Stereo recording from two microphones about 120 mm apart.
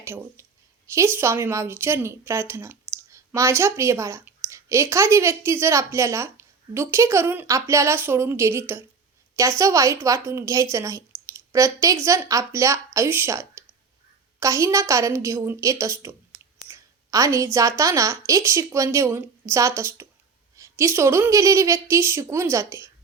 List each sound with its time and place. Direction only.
0.0 s a woman's voice: 20° right (ahead or behind)